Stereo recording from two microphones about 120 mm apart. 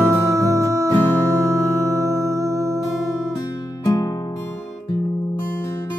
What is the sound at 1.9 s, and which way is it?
Music, 25° right (ahead or behind).